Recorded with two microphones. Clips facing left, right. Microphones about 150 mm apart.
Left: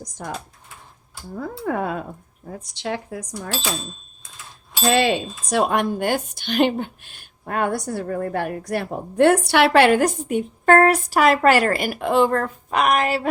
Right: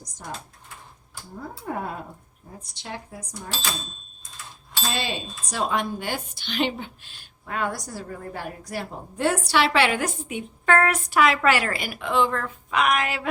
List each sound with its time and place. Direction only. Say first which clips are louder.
0.2 s speech: left 5 dB; 70° left (ahead or behind)
1.4 s speech: left 7 dB; 75° left (ahead or behind)
4.9 s a woman's voice: left 12 dB; 70° left (ahead or behind); by 13.2 s 35° left (ahead or behind)